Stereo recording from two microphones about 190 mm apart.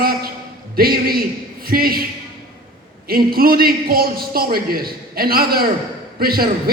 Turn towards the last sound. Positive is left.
turn(degrees=-50)  # may be behind; listen again after turning